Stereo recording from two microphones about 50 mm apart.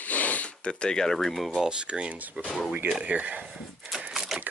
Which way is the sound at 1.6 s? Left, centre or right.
Centre.